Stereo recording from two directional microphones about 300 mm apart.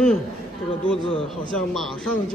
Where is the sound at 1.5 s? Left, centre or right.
Centre.